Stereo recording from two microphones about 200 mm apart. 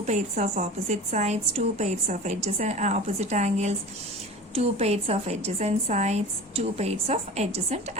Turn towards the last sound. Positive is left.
turn(degrees=-30)  # may be behind; listen again after turning